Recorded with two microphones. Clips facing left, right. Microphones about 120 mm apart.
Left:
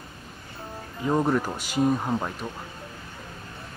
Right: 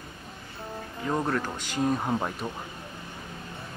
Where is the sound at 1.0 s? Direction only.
15° left (ahead or behind).